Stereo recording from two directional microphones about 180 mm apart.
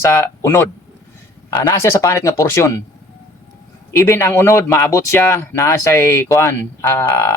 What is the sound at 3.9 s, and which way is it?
Speech, 15° left (ahead or behind).